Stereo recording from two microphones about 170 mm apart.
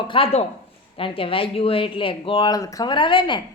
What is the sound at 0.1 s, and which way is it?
Speech, 35° left (ahead or behind).